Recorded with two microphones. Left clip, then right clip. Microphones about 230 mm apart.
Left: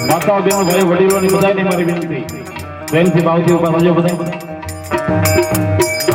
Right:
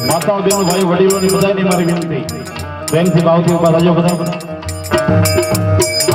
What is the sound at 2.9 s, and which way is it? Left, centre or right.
Music, left.